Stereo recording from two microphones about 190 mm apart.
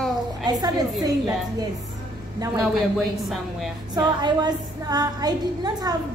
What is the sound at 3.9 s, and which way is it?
A woman's voice, 20° right (ahead or behind).